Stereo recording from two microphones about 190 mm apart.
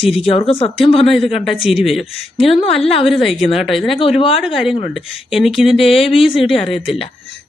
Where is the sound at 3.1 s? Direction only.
Centre (ahead or behind).